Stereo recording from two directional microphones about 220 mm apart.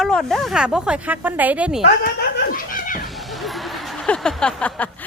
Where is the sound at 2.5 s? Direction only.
40° left (ahead or behind).